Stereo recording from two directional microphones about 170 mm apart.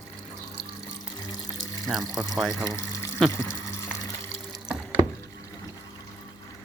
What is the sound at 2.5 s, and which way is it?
Water, 20° left (ahead or behind).